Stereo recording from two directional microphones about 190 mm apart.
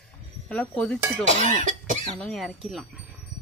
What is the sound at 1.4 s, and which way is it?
Speech, 40° right (ahead or behind).